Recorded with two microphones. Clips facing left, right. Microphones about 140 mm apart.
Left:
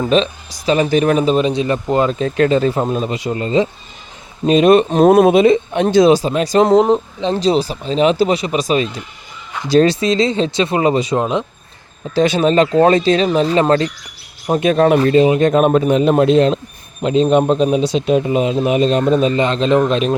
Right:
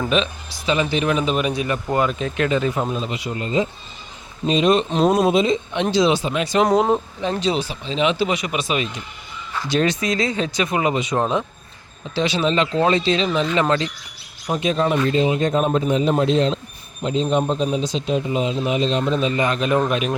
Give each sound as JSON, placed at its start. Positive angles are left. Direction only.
{"t": 0.1, "sound": "speech", "side_deg": 35}
{"t": 2.9, "sound": "speech", "side_deg": 50}
{"t": 3.3, "sound": "speech", "side_deg": 80}
{"t": 4.4, "sound": "a man's voice", "side_deg": 55}
{"t": 5.8, "sound": "speech", "side_deg": 45}
{"t": 6.7, "sound": "speech", "side_deg": 20}
{"t": 7.3, "sound": "speech", "side_deg": 35}
{"t": 11.2, "sound": "speech", "side_deg": 15}
{"t": 12.1, "sound": "speech", "side_deg": 50}
{"t": 14.5, "sound": "a man's voice", "side_deg": 55}
{"t": 17.0, "sound": "a man's voice", "side_deg": 70}
{"t": 19.4, "sound": "speech", "side_deg": 25}